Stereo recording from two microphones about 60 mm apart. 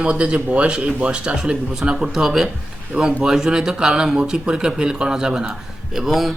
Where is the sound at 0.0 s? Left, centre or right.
Centre.